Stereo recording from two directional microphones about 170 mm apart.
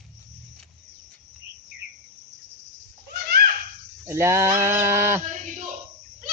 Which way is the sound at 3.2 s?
70° right (ahead or behind).